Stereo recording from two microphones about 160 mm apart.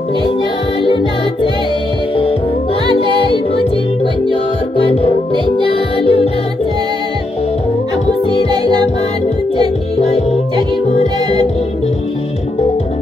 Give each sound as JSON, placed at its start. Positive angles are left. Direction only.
{"t": 3.5, "sound": "music", "side_deg": 35}
{"t": 8.3, "sound": "music", "side_deg": 40}
{"t": 9.9, "sound": "music", "side_deg": 40}